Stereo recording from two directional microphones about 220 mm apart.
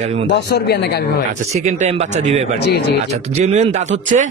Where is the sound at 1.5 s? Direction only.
30° right (ahead or behind).